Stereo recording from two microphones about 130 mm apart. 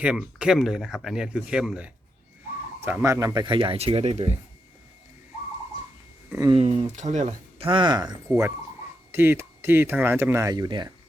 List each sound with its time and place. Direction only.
0.0 s speech: 10° right (ahead or behind)
2.8 s speech: 20° right (ahead or behind)
3.4 s speech: 40° right (ahead or behind)
6.5 s speech: 45° right (ahead or behind)
6.9 s speech: 65° right (ahead or behind)
7.6 s speech: 40° right (ahead or behind)
8.3 s speech: 20° right (ahead or behind)